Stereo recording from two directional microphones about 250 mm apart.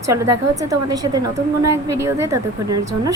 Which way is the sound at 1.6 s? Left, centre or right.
Right.